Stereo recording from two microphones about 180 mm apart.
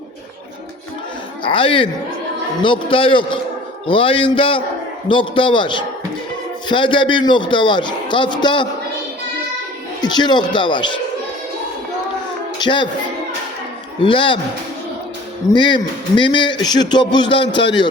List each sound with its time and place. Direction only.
1.5 s a man's voice: 30° left (ahead or behind)
10.0 s a man's voice: 25° left (ahead or behind)
12.5 s speech: 25° left (ahead or behind)
14.0 s a man's voice: 30° left (ahead or behind)
15.5 s a man's voice: 25° left (ahead or behind)
17.4 s a man's voice: 75° left (ahead or behind)